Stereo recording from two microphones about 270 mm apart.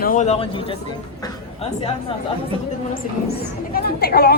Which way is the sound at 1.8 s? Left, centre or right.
Left.